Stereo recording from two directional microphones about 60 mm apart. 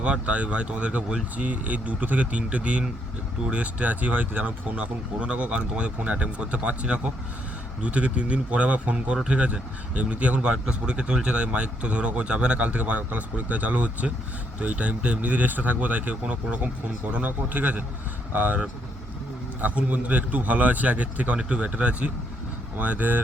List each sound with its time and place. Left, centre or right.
0.0 s speech: right
19.6 s speech: right